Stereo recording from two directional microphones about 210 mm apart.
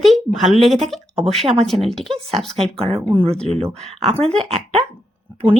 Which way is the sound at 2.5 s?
30° right (ahead or behind).